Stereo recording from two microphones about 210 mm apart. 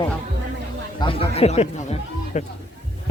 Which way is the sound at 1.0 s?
25° left (ahead or behind).